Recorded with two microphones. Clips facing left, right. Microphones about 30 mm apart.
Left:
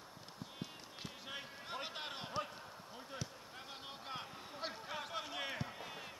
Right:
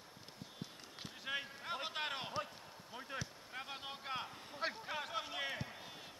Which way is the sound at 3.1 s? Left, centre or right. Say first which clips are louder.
Right 2 dB; centre.